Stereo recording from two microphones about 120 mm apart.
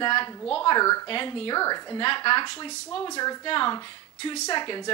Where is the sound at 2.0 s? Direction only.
45° left (ahead or behind).